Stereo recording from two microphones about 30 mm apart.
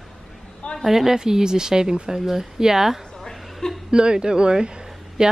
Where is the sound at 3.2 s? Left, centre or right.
Centre.